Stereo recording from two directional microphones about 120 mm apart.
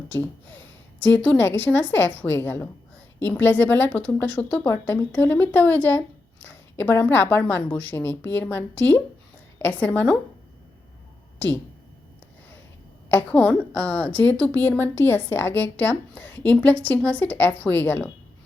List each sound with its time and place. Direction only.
0.1 s a woman's voice: 15° left (ahead or behind)
13.1 s a woman's voice: 15° left (ahead or behind)